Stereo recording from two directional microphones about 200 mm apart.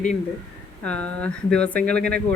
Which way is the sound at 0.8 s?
5° left (ahead or behind).